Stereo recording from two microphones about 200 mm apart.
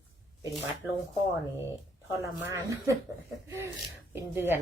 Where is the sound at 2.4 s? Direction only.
15° right (ahead or behind).